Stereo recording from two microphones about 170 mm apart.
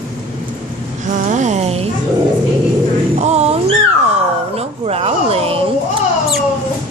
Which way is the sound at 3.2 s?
40° right (ahead or behind).